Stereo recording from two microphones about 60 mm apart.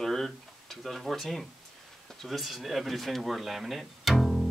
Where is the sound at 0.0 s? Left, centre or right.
Centre.